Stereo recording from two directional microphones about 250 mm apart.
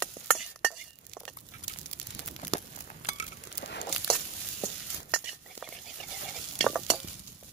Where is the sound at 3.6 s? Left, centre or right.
Left.